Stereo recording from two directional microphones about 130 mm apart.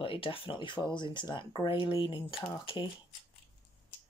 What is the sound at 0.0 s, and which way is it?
Speech, 45° left (ahead or behind).